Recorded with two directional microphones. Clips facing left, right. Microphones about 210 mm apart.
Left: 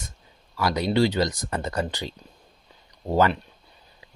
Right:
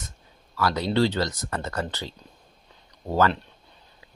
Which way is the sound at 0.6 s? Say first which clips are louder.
Left 1 dB; 15° left (ahead or behind).